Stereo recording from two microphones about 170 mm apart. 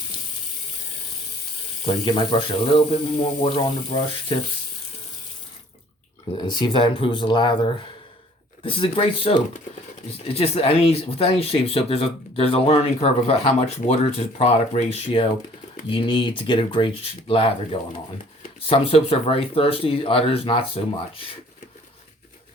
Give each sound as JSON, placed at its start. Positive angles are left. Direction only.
{"t": 2.0, "sound": "speech", "side_deg": 30}
{"t": 6.3, "sound": "speech", "side_deg": 25}
{"t": 8.6, "sound": "speech", "side_deg": 30}